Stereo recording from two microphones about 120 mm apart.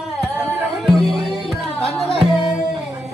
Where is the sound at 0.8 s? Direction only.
Centre (ahead or behind).